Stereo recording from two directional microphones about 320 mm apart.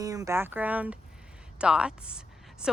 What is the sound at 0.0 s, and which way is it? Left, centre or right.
A woman's voice, centre.